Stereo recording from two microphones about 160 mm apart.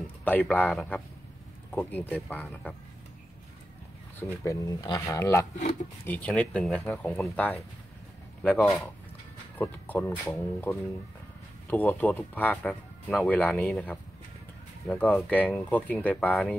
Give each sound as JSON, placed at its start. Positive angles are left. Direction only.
{"t": 0.0, "sound": "speech", "side_deg": 10}
{"t": 4.2, "sound": "speech", "side_deg": 20}